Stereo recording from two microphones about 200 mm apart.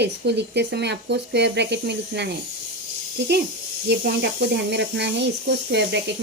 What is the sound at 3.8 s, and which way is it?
Speech, 55° right (ahead or behind).